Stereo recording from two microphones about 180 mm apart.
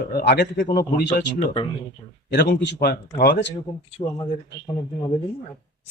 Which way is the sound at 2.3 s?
65° left (ahead or behind).